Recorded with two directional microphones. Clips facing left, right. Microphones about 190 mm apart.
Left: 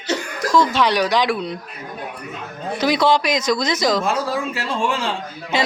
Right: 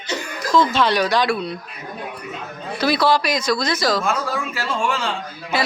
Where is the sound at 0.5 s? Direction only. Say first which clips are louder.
Even; 15° left (ahead or behind).